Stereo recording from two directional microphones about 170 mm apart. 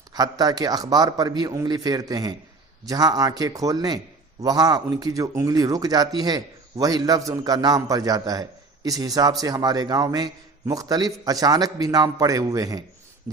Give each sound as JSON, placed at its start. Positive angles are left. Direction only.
{"t": 0.1, "sound": "a man's voice", "side_deg": -25}